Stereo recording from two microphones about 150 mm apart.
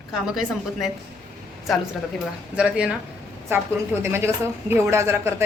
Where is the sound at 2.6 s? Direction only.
5° right (ahead or behind).